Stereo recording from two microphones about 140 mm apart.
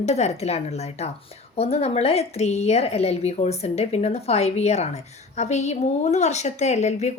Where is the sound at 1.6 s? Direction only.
45° left (ahead or behind).